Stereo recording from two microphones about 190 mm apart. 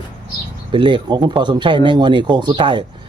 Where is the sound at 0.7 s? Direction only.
25° right (ahead or behind).